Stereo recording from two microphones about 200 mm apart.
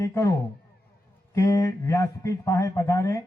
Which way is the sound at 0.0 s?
15° left (ahead or behind).